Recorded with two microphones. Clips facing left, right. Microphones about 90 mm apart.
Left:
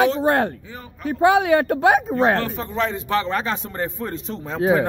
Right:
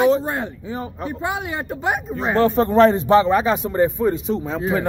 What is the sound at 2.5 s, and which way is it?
Speech, 40° right (ahead or behind).